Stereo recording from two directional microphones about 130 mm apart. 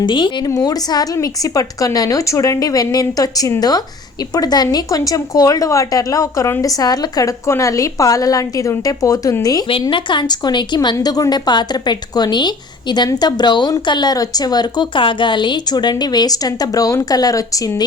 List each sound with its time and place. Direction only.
0.0 s speech: 40° left (ahead or behind)